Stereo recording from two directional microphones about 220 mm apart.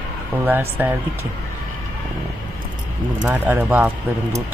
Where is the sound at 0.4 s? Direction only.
10° right (ahead or behind).